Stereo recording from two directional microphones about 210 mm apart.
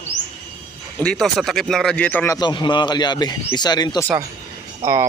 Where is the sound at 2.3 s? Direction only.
20° left (ahead or behind).